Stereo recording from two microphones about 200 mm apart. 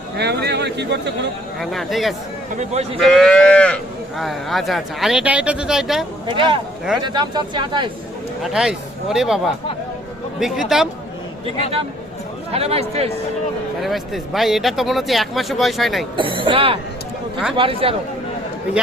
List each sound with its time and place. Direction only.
0.2 s a man's voice: 55° right (ahead or behind)
1.5 s speech: centre (ahead or behind)
2.6 s speech: 35° right (ahead or behind)
3.0 s livestock: centre (ahead or behind)
4.2 s speech: centre (ahead or behind)
6.2 s speech: 25° right (ahead or behind)
8.4 s speech: centre (ahead or behind)
10.4 s speech: centre (ahead or behind)
12.5 s speech: 30° right (ahead or behind)
13.8 s speech: centre (ahead or behind)
16.1 s speech: 25° right (ahead or behind)